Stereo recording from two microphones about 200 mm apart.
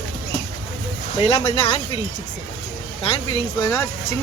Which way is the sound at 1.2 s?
30° left (ahead or behind).